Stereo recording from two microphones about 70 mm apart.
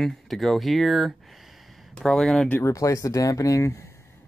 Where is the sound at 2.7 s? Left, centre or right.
Left.